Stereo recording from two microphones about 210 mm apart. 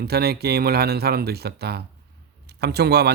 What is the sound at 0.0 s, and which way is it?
Speech, 50° right (ahead or behind).